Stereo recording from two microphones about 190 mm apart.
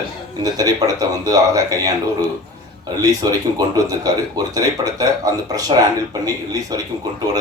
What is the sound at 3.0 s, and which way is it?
Speech, 20° right (ahead or behind).